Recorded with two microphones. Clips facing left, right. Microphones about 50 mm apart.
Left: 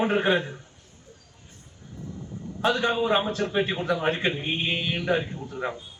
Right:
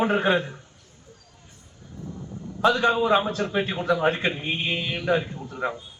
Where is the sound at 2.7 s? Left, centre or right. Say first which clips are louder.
Right 3 dB; right.